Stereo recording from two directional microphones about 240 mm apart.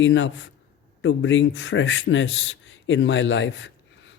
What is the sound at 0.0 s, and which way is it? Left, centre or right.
Speech, left.